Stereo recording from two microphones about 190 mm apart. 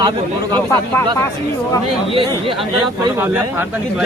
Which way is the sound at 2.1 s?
30° right (ahead or behind).